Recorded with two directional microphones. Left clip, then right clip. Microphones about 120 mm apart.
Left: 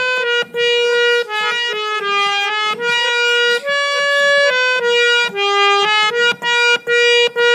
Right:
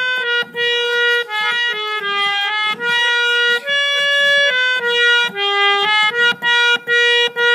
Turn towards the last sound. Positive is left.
turn(degrees=30)  # may be behind; listen again after turning